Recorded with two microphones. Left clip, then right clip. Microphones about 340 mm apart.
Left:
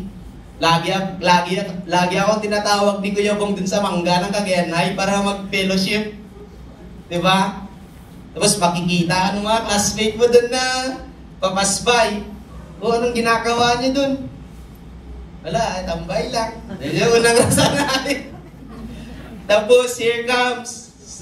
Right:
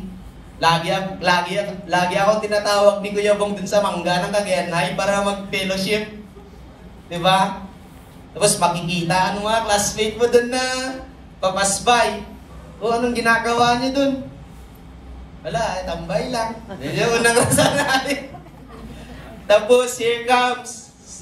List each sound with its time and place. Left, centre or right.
0.6 s a man's voice: centre
7.1 s a man's voice: centre
15.4 s a man's voice: centre
17.5 s speech: centre
19.4 s a man's voice: centre